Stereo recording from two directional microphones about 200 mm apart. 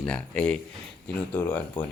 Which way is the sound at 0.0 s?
5° left (ahead or behind).